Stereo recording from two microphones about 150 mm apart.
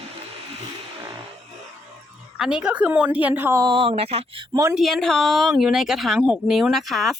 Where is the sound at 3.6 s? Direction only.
35° right (ahead or behind).